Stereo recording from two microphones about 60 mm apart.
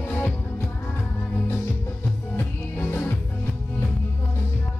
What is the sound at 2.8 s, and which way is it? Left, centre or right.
Music, left.